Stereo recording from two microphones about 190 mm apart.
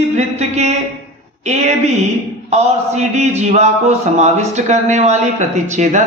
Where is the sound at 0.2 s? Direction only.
35° right (ahead or behind).